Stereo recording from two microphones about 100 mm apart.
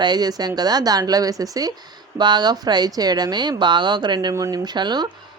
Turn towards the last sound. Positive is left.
turn(degrees=-45)  # may be behind; listen again after turning